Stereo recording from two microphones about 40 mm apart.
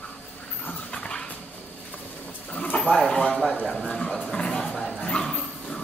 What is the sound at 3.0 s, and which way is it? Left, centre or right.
Speech, centre.